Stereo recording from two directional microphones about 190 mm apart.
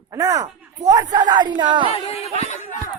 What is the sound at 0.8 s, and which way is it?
Speech, 20° right (ahead or behind).